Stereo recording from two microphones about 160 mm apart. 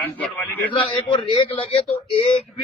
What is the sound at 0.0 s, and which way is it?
Speech, 15° left (ahead or behind).